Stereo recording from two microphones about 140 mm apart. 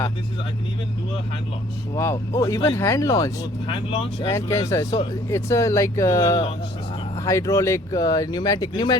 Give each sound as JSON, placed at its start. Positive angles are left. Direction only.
{"t": 2.0, "sound": "speech", "side_deg": 20}
{"t": 3.7, "sound": "speech", "side_deg": 40}
{"t": 4.3, "sound": "speech", "side_deg": 20}